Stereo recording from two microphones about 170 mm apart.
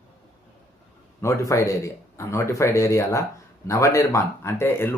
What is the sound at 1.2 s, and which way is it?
Speech, 15° left (ahead or behind).